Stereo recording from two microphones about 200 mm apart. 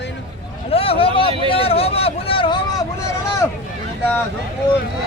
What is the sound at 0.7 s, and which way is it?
Vehicle, 30° left (ahead or behind).